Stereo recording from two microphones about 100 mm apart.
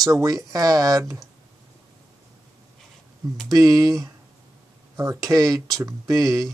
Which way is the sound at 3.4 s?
35° right (ahead or behind).